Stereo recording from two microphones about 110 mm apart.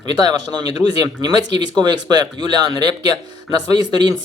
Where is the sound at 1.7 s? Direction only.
40° right (ahead or behind).